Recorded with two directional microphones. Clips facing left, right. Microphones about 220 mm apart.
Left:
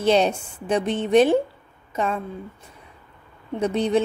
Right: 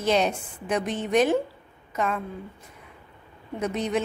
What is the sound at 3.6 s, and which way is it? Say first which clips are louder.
Speech: left 5 dB; 30° left (ahead or behind).